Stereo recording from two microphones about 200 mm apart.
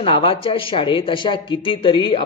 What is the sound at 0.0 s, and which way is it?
Speech, 25° left (ahead or behind).